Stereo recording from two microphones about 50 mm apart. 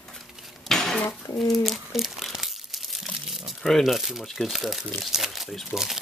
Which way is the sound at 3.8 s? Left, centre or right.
Centre.